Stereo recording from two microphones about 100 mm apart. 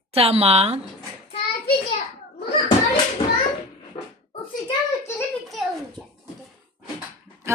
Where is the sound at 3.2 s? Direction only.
65° left (ahead or behind).